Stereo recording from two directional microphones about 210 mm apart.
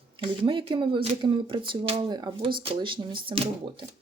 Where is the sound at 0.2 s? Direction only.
25° right (ahead or behind).